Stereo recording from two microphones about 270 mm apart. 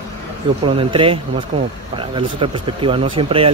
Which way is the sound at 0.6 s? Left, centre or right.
Centre.